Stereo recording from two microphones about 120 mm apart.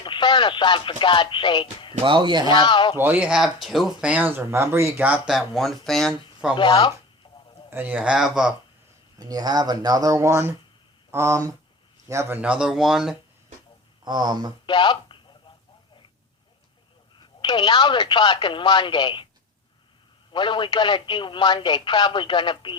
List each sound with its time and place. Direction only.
0.0 s speech: 40° left (ahead or behind)
2.0 s speech: 45° right (ahead or behind)
2.5 s speech: 40° left (ahead or behind)
3.0 s speech: 15° right (ahead or behind)
6.6 s speech: 40° left (ahead or behind)
7.7 s speech: 15° right (ahead or behind)
9.1 s speech: 30° right (ahead or behind)
12.4 s speech: 5° right (ahead or behind)
14.0 s speech: 35° right (ahead or behind)
14.7 s speech: 40° left (ahead or behind)
17.2 s speech: 40° left (ahead or behind)
20.3 s speech: 45° left (ahead or behind)